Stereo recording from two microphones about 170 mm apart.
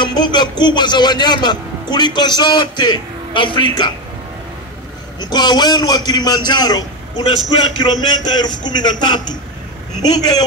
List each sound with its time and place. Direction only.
0.0 s a man's voice: 25° left (ahead or behind)
5.2 s a man's voice: 25° left (ahead or behind)